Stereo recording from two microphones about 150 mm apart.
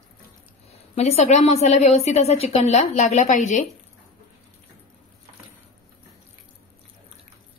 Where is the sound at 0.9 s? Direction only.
45° left (ahead or behind).